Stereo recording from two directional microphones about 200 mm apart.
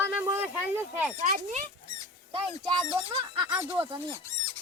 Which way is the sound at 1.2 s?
35° right (ahead or behind).